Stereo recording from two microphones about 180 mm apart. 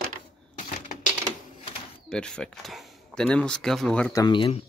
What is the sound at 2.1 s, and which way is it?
Speech, 5° left (ahead or behind).